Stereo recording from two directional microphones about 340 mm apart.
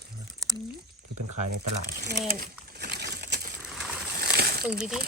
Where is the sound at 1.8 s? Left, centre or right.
Right.